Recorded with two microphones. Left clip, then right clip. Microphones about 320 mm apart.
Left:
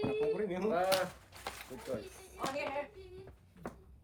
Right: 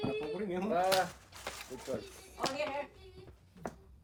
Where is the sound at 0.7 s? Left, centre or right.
Centre.